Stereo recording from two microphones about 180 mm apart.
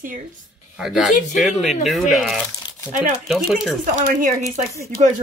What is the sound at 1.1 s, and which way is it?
Speech, 45° left (ahead or behind).